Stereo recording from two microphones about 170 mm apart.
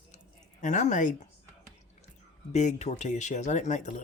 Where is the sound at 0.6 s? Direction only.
45° left (ahead or behind).